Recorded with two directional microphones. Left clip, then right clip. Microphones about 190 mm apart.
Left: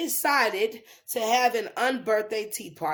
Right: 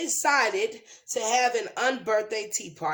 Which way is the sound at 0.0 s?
35° left (ahead or behind).